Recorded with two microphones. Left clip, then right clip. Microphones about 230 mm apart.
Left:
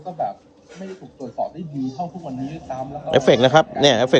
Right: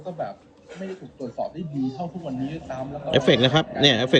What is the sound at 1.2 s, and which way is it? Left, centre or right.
Speech, left.